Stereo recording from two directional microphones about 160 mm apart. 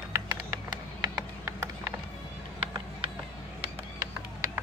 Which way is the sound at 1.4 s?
15° right (ahead or behind).